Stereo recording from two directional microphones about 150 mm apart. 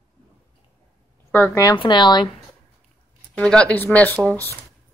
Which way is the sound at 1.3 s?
10° left (ahead or behind).